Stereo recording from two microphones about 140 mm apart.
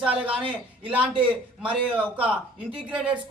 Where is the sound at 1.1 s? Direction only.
35° right (ahead or behind).